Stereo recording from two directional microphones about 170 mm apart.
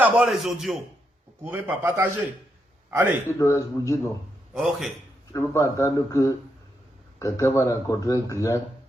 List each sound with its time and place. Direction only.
0.0 s a man's voice: 5° right (ahead or behind)
3.2 s speech: 15° left (ahead or behind)
4.5 s a man's voice: centre (ahead or behind)
5.3 s speech: 20° left (ahead or behind)